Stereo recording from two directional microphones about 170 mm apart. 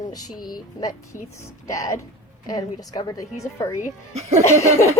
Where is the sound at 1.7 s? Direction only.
20° left (ahead or behind).